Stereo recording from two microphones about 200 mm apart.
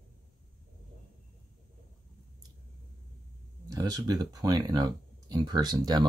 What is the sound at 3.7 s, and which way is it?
Speech, 20° right (ahead or behind).